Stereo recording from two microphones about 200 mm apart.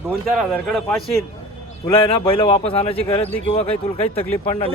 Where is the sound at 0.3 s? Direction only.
Centre (ahead or behind).